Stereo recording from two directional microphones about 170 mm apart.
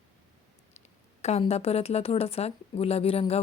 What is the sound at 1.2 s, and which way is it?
Speech, 40° left (ahead or behind).